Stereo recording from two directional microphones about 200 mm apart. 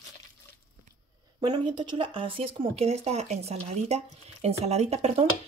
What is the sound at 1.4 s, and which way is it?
Speech, 20° right (ahead or behind).